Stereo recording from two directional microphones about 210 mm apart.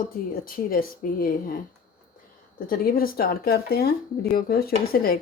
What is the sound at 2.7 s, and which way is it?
Speech, 45° left (ahead or behind).